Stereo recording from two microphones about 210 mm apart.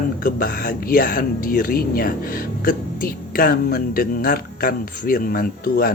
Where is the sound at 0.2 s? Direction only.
45° left (ahead or behind).